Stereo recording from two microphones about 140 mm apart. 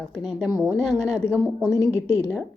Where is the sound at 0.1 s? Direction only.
5° right (ahead or behind).